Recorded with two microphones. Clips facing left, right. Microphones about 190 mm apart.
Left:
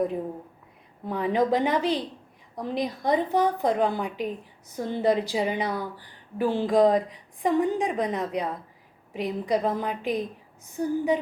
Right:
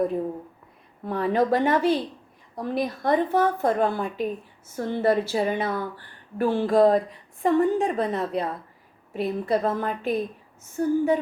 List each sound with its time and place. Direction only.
1.0 s a woman's voice: 15° left (ahead or behind)